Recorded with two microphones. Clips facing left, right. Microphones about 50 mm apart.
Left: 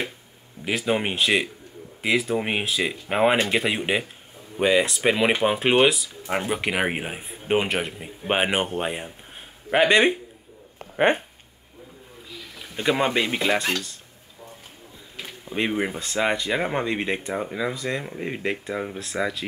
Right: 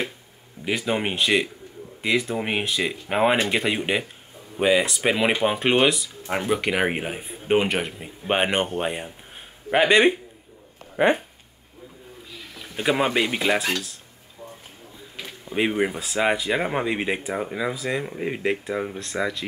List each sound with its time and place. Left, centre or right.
0.7 s speech: centre
11.0 s speech: left
12.5 s speech: centre
15.2 s speech: centre